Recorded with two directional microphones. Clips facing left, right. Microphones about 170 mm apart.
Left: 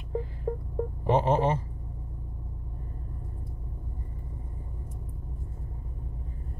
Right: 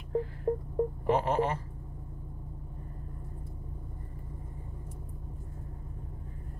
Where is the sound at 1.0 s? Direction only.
25° left (ahead or behind).